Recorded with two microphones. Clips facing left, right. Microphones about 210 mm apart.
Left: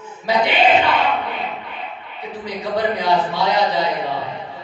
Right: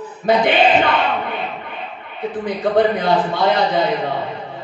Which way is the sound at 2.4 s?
55° right (ahead or behind).